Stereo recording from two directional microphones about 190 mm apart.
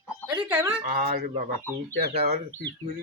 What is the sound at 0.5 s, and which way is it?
Speech, 10° right (ahead or behind).